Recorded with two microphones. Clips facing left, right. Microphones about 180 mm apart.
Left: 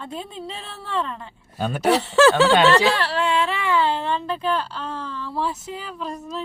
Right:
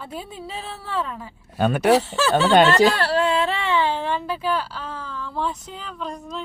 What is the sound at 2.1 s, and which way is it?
Speech, 80° left.